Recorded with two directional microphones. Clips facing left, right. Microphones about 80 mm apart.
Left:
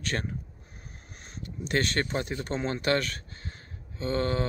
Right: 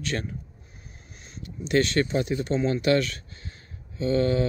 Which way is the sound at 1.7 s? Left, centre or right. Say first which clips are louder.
Right 5 dB; left.